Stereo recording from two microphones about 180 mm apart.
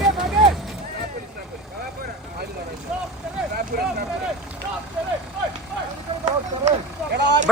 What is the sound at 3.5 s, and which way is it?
Speech, 60° right (ahead or behind).